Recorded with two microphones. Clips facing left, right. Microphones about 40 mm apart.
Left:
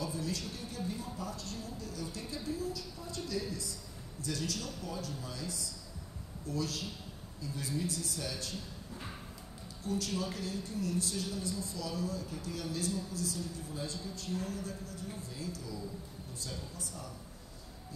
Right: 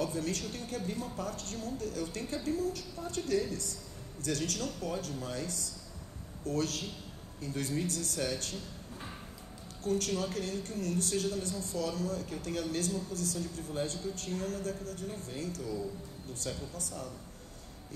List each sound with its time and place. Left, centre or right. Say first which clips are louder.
0.0 s a woman's voice: right 3 dB; right
9.8 s a woman's voice: right 3 dB; right